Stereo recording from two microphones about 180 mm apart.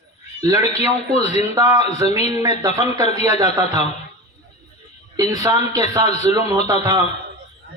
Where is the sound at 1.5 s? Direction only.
15° right (ahead or behind).